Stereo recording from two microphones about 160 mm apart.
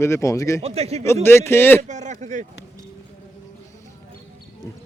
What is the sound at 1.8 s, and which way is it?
Speech, 50° right (ahead or behind).